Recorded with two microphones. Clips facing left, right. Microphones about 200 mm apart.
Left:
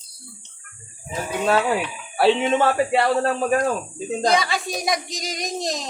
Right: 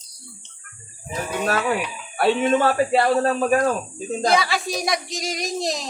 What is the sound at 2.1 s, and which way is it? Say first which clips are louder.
Speech: left 1 dB; 25° left (ahead or behind).